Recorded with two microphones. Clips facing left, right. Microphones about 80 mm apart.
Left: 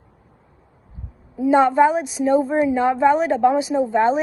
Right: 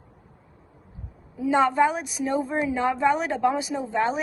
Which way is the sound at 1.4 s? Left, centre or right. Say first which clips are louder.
Left 6 dB; left.